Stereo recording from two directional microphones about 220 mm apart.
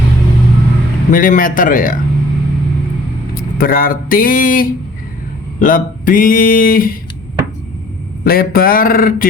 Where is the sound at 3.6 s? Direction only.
40° left (ahead or behind).